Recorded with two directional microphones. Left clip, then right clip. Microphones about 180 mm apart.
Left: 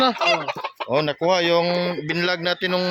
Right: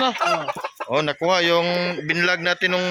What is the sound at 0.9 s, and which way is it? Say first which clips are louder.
Speech: even; 20° left (ahead or behind).